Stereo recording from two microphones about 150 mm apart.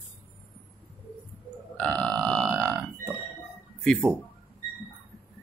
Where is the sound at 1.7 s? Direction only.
5° left (ahead or behind).